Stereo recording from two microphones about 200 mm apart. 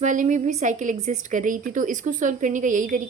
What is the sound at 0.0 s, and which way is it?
A woman's voice, 40° right (ahead or behind).